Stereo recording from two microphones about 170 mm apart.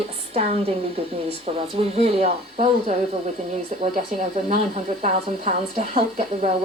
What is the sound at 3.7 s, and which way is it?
A woman's voice, 45° right (ahead or behind).